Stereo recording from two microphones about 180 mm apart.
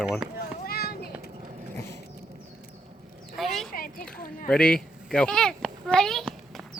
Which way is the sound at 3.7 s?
50° left (ahead or behind).